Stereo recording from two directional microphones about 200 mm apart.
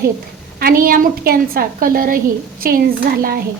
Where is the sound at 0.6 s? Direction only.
45° right (ahead or behind).